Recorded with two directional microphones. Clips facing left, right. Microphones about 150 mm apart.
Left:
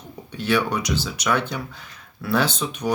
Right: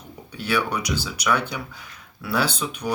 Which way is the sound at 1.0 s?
10° right (ahead or behind).